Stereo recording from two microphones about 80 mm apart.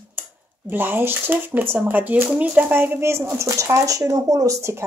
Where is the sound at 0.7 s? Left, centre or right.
Right.